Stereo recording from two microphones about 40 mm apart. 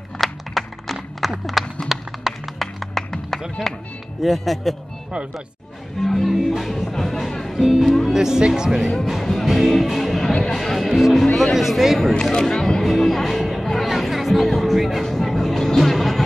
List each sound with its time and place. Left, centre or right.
0.2 s a sound: centre
1.4 s clip-clop: centre
1.9 s a sound: centre
2.6 s music: centre
4.2 s speech: centre
5.9 s music: centre
6.3 s speech: centre
8.1 s speech: centre
9.2 s music: centre
9.5 s speech: centre
12.3 s music: centre
12.6 s music: centre